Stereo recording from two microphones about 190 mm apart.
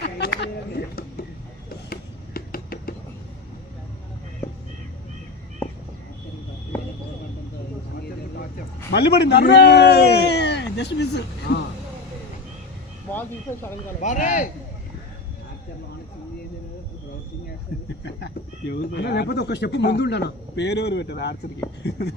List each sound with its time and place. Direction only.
0.0 s a sound: 60° left (ahead or behind)
5.6 s a sound: 10° left (ahead or behind)
8.9 s a man's voice: 60° left (ahead or behind)
13.1 s speech: 10° left (ahead or behind)
14.0 s speech: 40° left (ahead or behind)
18.7 s speech: 60° left (ahead or behind)